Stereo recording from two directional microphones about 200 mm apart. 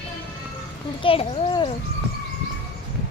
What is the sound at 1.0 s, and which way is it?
Speech, 30° left (ahead or behind).